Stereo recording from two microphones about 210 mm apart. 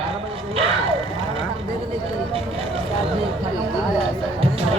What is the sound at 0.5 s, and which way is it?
Vehicle, 25° right (ahead or behind).